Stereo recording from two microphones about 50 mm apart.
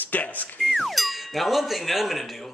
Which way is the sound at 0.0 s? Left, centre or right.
Left.